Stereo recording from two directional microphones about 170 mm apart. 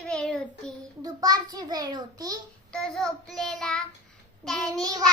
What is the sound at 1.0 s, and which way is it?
A child's voice, 20° right (ahead or behind).